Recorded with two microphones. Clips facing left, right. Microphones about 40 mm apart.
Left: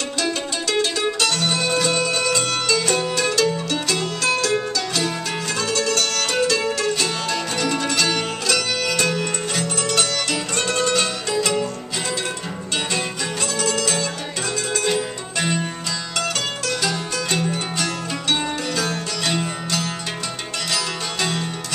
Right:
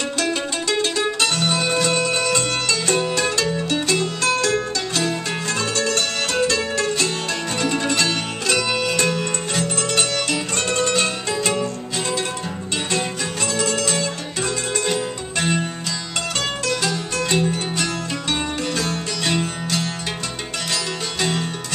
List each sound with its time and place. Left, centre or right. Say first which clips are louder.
1.2 s music: right 1 dB; right
5.6 s music: left 1 dB; right
9.6 s music: right 1 dB; right
11.3 s music: left 3 dB; centre
13.6 s music: even; right
14.9 s music: even; centre
17.3 s music: right 3 dB; right
18.3 s music: left 1 dB; right